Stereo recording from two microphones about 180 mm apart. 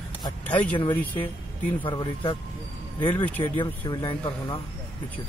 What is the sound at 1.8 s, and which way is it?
Speech, 25° left (ahead or behind).